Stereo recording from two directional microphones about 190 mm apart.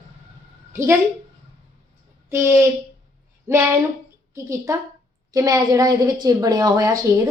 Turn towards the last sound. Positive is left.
turn(degrees=-20)  # may be behind; listen again after turning